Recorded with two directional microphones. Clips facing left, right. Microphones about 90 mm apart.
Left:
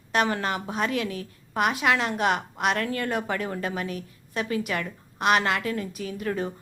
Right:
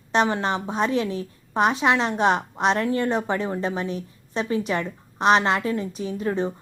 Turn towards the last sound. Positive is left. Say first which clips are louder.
# right 4 dB
turn(degrees=-25)  # may be behind; listen again after turning